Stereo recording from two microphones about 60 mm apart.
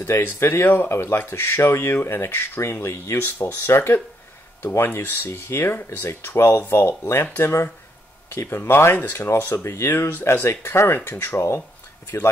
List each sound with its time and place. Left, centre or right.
0.0 s speech: left
6.7 s speech: left